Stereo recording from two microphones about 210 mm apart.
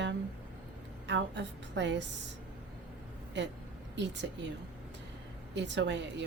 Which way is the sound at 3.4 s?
55° right (ahead or behind).